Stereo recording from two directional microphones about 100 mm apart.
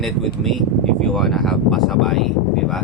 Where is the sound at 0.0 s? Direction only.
Centre (ahead or behind).